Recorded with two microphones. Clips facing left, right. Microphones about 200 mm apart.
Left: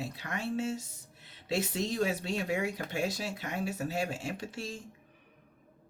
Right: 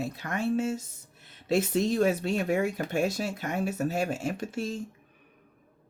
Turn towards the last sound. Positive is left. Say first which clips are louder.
# right 7 dB
turn(degrees=-50)  # may be behind; listen again after turning